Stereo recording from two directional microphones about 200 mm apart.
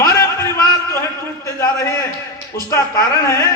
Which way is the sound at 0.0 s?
15° left (ahead or behind).